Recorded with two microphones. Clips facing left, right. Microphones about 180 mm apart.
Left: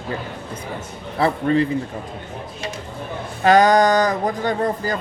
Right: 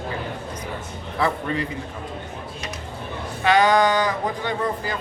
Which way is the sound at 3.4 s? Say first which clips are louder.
Left 4 dB; 40° left (ahead or behind).